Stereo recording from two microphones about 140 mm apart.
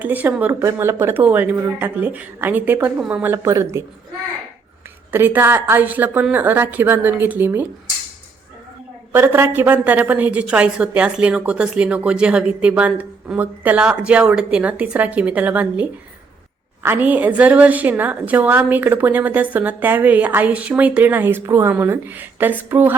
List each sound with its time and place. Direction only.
0.0 s a woman's voice: 10° right (ahead or behind)
5.1 s a woman's voice: 15° right (ahead or behind)
9.1 s a woman's voice: 15° right (ahead or behind)